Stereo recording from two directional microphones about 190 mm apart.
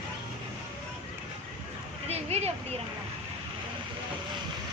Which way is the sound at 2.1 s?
35° right (ahead or behind).